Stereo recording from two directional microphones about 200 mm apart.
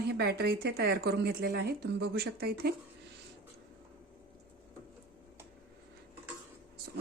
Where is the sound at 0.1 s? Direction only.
55° right (ahead or behind).